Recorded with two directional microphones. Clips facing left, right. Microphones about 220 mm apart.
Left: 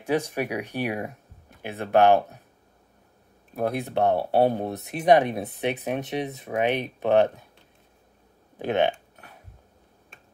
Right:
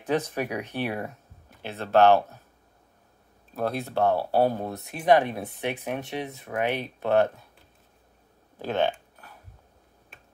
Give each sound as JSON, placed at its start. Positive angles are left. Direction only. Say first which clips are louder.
{"t": 0.0, "sound": "speech", "louder": "left 1 dB", "side_deg": 10}
{"t": 3.5, "sound": "speech", "louder": "left 2 dB", "side_deg": 15}
{"t": 8.5, "sound": "speech", "louder": "left 3 dB", "side_deg": 20}